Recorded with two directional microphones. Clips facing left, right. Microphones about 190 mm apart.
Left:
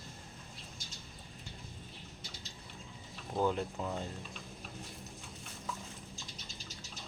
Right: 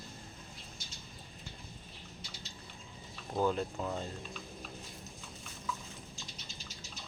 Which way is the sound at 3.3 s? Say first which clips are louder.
Right 1 dB; 15° left (ahead or behind).